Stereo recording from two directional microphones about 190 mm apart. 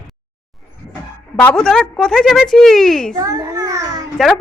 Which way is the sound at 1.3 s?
5° left (ahead or behind).